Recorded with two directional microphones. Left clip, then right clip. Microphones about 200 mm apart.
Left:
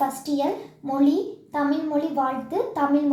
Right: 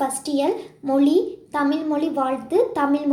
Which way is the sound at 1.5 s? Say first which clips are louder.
Right 2 dB; 30° right (ahead or behind).